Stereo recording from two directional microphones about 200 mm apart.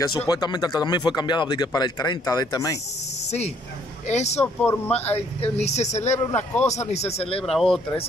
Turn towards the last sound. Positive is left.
turn(degrees=0)  # may be behind; listen again after turning